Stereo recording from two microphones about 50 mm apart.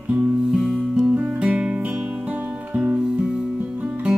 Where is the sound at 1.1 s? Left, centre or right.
Right.